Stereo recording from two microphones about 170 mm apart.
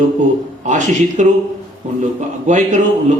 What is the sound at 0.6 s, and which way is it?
Speech, 45° right (ahead or behind).